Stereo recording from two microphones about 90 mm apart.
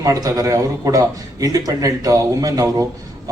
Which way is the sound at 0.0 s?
40° right (ahead or behind).